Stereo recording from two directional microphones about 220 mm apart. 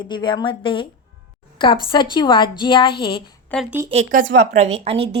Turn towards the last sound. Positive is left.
turn(degrees=-25)  # may be behind; listen again after turning